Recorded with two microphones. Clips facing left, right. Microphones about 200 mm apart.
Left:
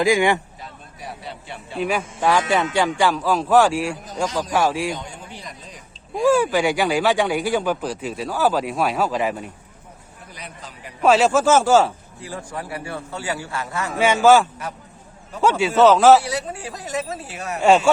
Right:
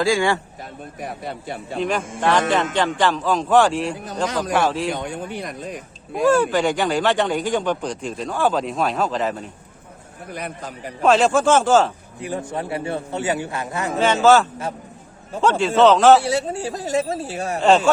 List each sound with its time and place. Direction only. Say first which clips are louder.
0.0 s speech: left 1 dB; 15° left (ahead or behind)
0.6 s speech: right 5 dB; 50° right (ahead or behind)
1.8 s speech: even; 10° left (ahead or behind)
4.9 s speech: right 4 dB; 60° right (ahead or behind)
6.2 s speech: even; 10° left (ahead or behind)
10.2 s a man's voice: right 9 dB; 55° right (ahead or behind)
11.0 s speech: even; 5° left (ahead or behind)
12.2 s a man's voice: right 5 dB; 20° right (ahead or behind)
14.0 s speech: left 1 dB; 10° left (ahead or behind)
16.2 s a man's voice: right 5 dB; 25° right (ahead or behind)
17.6 s speech: left 1 dB; 10° left (ahead or behind)